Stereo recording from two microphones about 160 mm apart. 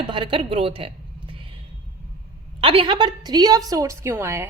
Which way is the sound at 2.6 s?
35° right (ahead or behind).